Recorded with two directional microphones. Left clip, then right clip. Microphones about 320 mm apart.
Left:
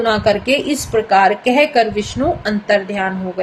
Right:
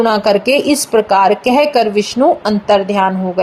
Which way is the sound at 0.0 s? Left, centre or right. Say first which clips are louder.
Right 3 dB; right.